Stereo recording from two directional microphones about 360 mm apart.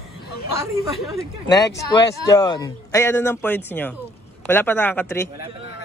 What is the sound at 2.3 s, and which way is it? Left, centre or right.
A man's voice, centre.